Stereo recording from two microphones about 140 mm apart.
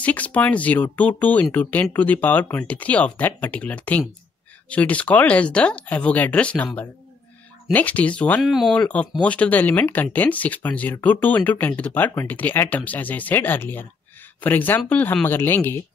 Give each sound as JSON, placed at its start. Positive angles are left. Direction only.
{"t": 0.0, "sound": "speech", "side_deg": 10}
{"t": 8.4, "sound": "speech", "side_deg": 0}
{"t": 8.7, "sound": "speech", "side_deg": 10}